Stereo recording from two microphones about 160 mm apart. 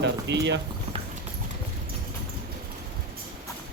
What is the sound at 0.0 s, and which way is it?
Speech, 90° right.